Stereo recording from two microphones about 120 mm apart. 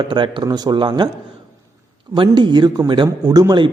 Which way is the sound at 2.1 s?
40° right (ahead or behind).